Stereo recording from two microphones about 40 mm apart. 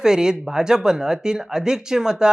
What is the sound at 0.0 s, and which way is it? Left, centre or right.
Speech, centre.